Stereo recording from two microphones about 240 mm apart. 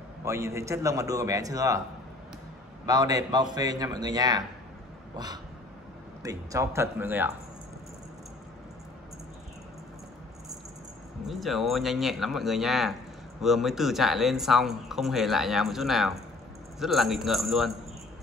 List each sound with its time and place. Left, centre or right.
0.2 s a man's voice: centre
2.9 s a man's voice: centre
11.2 s speech: centre